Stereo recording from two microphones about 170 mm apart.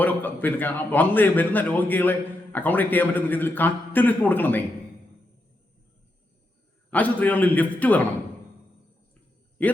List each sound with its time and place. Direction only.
0.0 s a man's voice: 10° left (ahead or behind)
6.9 s a man's voice: 10° left (ahead or behind)
9.6 s a man's voice: 10° left (ahead or behind)